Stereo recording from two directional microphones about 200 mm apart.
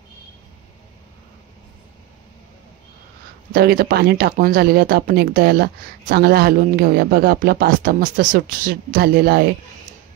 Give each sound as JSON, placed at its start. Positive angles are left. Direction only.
{"t": 3.5, "sound": "speech", "side_deg": -50}